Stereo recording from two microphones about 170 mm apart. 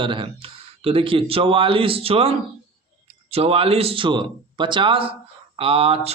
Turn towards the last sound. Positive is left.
turn(degrees=-35)  # may be behind; listen again after turning